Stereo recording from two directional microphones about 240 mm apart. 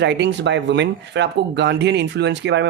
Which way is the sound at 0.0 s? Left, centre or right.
Right.